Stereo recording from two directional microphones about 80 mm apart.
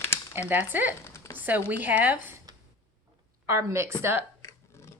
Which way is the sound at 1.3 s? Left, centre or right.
Right.